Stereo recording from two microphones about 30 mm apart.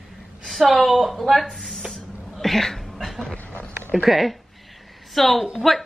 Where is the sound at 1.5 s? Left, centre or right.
Centre.